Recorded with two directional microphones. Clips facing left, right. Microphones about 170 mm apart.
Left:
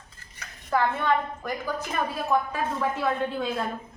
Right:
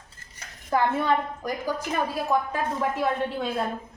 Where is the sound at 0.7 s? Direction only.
20° right (ahead or behind).